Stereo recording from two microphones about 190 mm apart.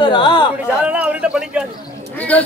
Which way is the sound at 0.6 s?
5° right (ahead or behind).